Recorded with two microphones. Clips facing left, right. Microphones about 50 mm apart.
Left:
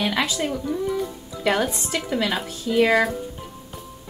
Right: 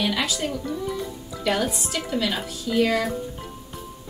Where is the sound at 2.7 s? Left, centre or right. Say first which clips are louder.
Left 2 dB; left.